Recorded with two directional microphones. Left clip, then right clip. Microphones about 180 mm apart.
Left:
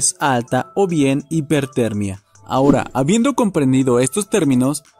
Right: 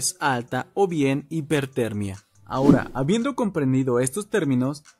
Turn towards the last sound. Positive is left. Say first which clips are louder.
# left 7 dB
turn(degrees=40)  # may be behind; listen again after turning